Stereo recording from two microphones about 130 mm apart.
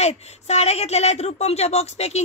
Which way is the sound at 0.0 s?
55° left (ahead or behind).